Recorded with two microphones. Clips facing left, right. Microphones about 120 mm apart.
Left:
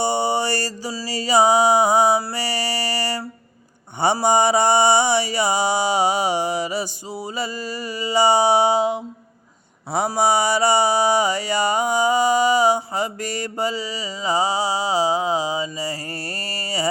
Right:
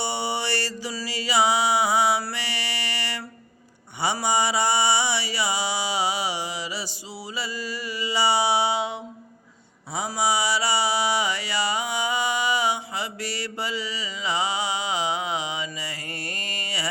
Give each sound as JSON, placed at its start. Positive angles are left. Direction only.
{"t": 0.0, "sound": "mantra", "side_deg": 45}
{"t": 0.9, "sound": "a sound", "side_deg": 40}
{"t": 4.0, "sound": "mantra", "side_deg": 50}
{"t": 7.3, "sound": "music", "side_deg": 45}
{"t": 9.9, "sound": "mantra", "side_deg": 60}